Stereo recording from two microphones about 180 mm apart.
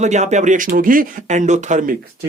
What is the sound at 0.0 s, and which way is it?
Speech, 40° right (ahead or behind).